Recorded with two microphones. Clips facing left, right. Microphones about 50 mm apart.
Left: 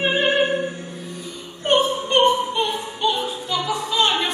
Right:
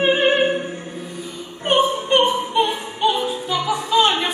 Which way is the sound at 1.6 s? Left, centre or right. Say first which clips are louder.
Right 1 dB; centre.